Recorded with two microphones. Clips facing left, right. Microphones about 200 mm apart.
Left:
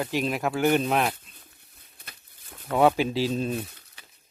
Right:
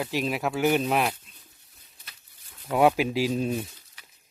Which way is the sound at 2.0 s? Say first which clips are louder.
Left 7 dB; 55° left (ahead or behind).